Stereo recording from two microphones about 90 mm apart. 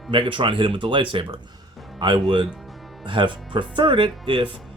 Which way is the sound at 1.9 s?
55° right (ahead or behind).